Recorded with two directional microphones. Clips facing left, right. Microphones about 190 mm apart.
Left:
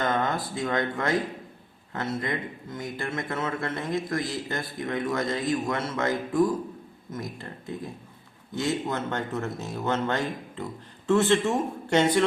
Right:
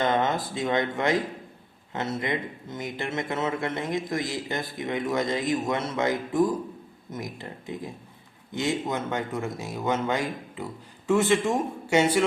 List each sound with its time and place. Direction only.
0.0 s speech: 20° right (ahead or behind)